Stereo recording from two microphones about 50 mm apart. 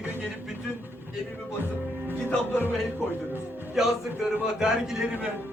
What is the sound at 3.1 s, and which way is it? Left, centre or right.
Speech, right.